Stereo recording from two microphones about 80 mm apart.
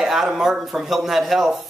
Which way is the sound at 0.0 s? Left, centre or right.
Centre.